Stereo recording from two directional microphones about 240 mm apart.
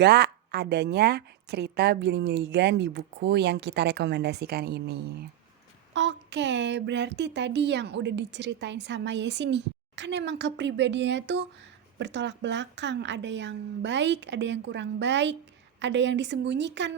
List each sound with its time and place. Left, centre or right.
0.0 s speech: right